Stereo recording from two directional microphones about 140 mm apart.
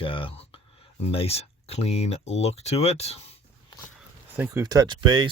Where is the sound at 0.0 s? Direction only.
40° left (ahead or behind).